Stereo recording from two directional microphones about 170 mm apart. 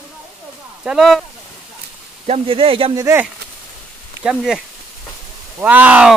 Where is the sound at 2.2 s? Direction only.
35° right (ahead or behind).